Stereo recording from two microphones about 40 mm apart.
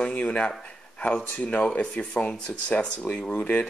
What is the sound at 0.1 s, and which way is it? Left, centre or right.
Speech, left.